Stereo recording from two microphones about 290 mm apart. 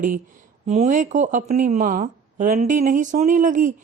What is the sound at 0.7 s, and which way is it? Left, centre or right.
Speech, right.